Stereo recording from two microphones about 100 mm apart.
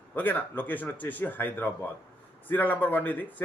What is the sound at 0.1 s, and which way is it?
A man's voice, 20° left (ahead or behind).